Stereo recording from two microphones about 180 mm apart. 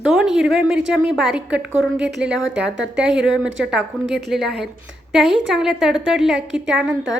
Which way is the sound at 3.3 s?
90° right.